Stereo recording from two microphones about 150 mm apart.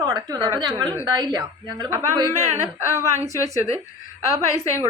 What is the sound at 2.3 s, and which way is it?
A woman's voice, 20° left (ahead or behind).